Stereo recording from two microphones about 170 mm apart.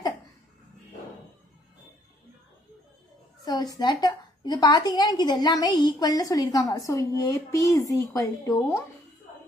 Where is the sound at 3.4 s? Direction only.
20° left (ahead or behind).